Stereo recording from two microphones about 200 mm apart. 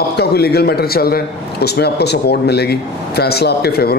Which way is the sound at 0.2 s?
55° left (ahead or behind).